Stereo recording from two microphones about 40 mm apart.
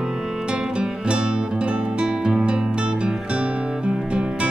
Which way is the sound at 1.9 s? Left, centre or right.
Right.